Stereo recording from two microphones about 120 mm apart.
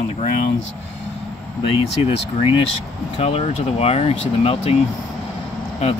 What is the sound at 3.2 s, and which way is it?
Speech, 55° left (ahead or behind).